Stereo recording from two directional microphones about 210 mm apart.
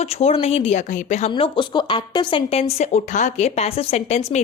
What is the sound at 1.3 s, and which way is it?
A woman's voice, 20° left (ahead or behind).